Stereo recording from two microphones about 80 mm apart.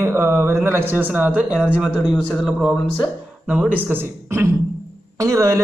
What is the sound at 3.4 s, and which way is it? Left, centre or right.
A man's voice, centre.